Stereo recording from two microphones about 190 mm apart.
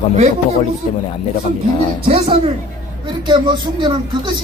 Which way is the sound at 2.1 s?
30° right (ahead or behind).